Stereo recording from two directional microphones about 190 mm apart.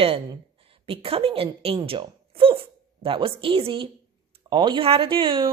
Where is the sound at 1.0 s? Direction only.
30° right (ahead or behind).